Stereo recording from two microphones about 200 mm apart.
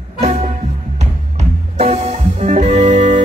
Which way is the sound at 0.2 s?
30° right (ahead or behind).